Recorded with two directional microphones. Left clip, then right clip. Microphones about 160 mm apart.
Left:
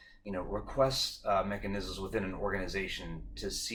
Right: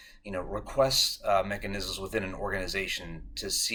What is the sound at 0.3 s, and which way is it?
Speech, 15° right (ahead or behind).